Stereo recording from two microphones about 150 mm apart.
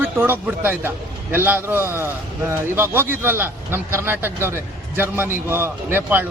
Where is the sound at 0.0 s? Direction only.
15° right (ahead or behind).